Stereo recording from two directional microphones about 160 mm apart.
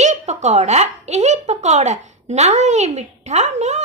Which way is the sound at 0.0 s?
45° right (ahead or behind).